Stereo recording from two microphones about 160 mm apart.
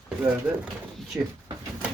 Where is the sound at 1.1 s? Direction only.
15° right (ahead or behind).